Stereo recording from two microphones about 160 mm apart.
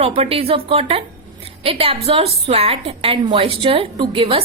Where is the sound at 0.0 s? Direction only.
35° right (ahead or behind).